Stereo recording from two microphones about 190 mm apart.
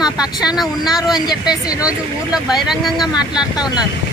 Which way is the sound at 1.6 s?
20° left (ahead or behind).